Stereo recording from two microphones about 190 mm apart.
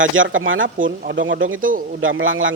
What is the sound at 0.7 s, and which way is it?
Speech, 45° right (ahead or behind).